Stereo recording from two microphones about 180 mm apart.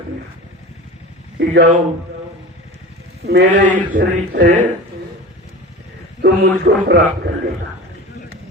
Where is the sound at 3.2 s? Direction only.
65° right (ahead or behind).